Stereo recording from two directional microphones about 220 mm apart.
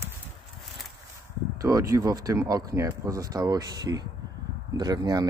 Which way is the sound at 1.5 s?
15° right (ahead or behind).